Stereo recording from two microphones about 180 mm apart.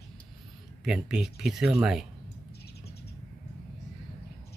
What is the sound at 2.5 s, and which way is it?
Bird, 65° left (ahead or behind).